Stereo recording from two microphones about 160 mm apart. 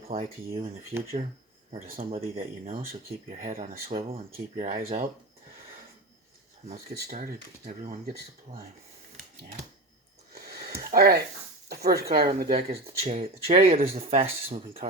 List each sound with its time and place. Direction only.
0.1 s speech: 40° right (ahead or behind)
2.0 s speech: 40° right (ahead or behind)
6.7 s speech: 45° right (ahead or behind)
10.8 s a sound: 70° right (ahead or behind)
11.7 s speech: 75° right (ahead or behind)
13.0 s speech: 50° right (ahead or behind)